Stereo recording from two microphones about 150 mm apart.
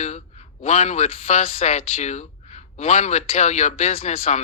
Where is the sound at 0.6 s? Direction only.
50° left (ahead or behind).